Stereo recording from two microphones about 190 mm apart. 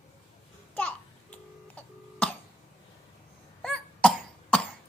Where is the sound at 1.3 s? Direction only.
5° left (ahead or behind).